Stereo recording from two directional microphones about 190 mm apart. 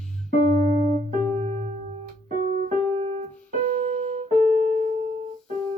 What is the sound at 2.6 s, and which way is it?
Keyboard, 35° right (ahead or behind).